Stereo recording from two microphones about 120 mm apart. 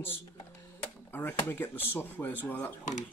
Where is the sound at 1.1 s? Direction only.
15° left (ahead or behind).